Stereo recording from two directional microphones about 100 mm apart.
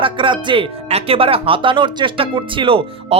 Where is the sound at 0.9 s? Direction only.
85° right.